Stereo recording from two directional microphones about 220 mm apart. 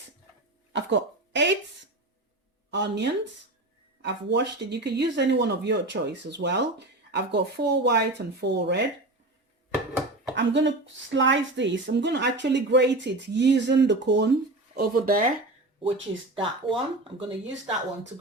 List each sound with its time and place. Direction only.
0.7 s speech: 55° right (ahead or behind)
2.6 s speech: 50° right (ahead or behind)
10.3 s speech: 55° right (ahead or behind)
14.8 s speech: 40° right (ahead or behind)
15.8 s speech: 25° right (ahead or behind)